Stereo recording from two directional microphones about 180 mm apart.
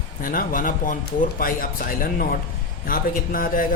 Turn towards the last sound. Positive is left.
turn(degrees=50)  # may be behind; listen again after turning